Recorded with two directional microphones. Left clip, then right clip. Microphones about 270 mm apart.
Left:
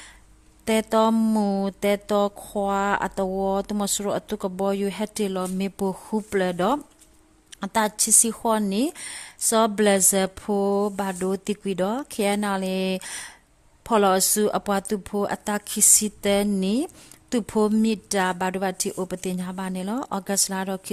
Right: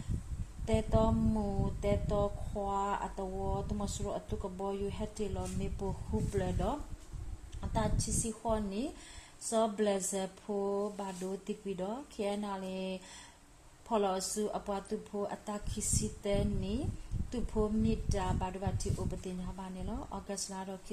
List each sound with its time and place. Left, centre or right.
0.6 s speech: left